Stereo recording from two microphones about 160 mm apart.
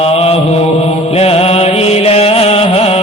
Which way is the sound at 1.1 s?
40° left (ahead or behind).